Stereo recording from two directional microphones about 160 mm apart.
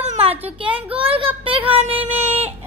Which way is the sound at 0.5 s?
30° right (ahead or behind).